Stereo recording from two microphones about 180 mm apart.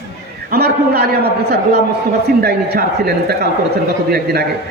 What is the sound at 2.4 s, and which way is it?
Speech, 60° right (ahead or behind).